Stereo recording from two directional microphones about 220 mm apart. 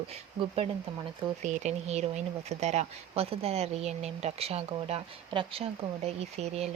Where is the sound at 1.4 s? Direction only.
30° right (ahead or behind).